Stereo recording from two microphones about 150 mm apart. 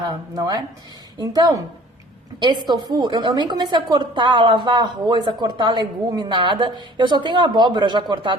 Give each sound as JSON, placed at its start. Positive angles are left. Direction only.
{"t": 0.0, "sound": "speech", "side_deg": -25}
{"t": 2.6, "sound": "a woman's voice", "side_deg": -30}